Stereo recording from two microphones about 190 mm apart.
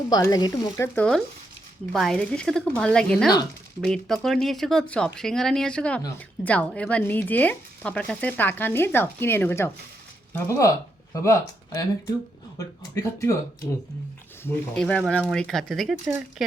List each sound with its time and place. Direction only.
0.1 s speech: 20° left (ahead or behind)
0.9 s speech: 5° left (ahead or behind)
14.4 s speech: 5° left (ahead or behind)